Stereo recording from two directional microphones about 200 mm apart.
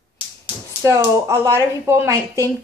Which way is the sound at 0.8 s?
15° right (ahead or behind).